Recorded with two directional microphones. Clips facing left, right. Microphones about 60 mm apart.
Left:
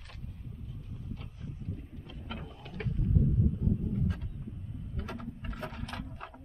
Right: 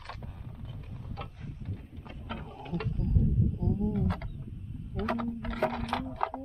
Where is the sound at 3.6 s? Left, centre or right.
Right.